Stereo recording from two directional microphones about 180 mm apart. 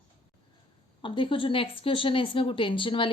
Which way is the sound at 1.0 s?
30° left (ahead or behind).